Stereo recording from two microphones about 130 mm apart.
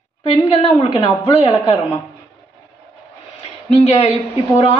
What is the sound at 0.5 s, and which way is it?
Speech, 40° left (ahead or behind).